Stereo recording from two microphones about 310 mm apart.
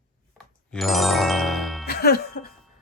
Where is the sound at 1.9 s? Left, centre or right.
Left.